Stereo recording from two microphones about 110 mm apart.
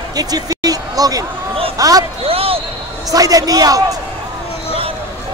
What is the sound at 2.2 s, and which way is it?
Basketball bounce, 60° right (ahead or behind).